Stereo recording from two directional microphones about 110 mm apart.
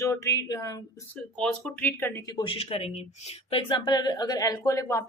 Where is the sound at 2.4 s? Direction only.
60° left (ahead or behind).